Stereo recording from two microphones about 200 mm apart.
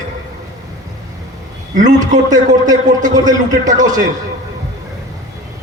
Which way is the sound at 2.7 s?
20° right (ahead or behind).